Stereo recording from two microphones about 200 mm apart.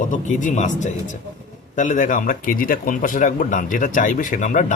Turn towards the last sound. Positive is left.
turn(degrees=40)  # may be behind; listen again after turning